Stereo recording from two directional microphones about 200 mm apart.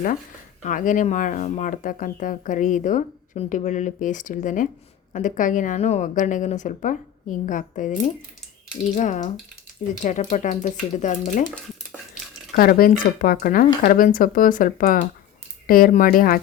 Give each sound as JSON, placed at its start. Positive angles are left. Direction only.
{"t": 0.6, "sound": "speech", "side_deg": 40}
{"t": 12.5, "sound": "speech", "side_deg": 45}